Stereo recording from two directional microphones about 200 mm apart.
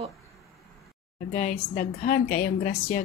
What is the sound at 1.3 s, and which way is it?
A woman's voice, 40° left (ahead or behind).